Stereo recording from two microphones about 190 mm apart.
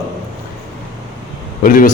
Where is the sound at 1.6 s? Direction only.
45° left (ahead or behind).